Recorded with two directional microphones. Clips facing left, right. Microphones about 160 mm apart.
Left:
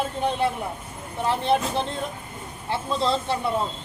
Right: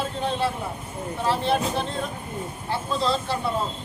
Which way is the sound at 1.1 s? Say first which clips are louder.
Left 1 dB; 20° left (ahead or behind).